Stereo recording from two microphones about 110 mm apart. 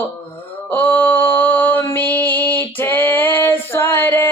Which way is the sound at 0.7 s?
20° left (ahead or behind).